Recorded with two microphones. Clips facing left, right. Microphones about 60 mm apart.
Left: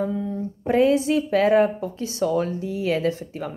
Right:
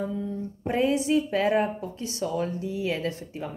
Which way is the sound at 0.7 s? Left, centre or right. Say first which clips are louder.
Left 5 dB; left.